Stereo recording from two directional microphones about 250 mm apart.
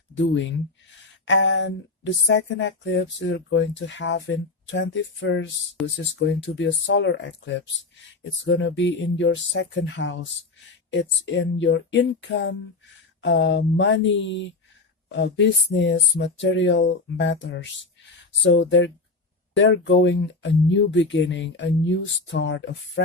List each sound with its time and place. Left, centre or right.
0.1 s speech: left
11.3 s speech: left